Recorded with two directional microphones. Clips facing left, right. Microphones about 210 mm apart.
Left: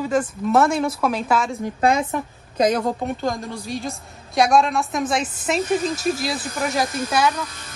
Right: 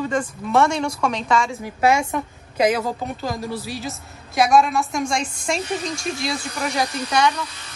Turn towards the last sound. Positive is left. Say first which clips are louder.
# even
turn(degrees=5)  # may be behind; listen again after turning